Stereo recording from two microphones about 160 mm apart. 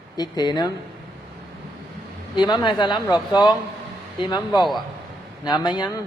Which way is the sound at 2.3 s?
30° left (ahead or behind).